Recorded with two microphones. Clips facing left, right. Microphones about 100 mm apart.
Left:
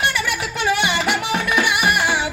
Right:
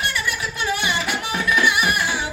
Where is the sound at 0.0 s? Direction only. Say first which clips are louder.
Left 3 dB; 80° left.